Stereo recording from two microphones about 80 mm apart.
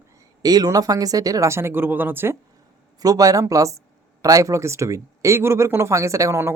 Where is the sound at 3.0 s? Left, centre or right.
Right.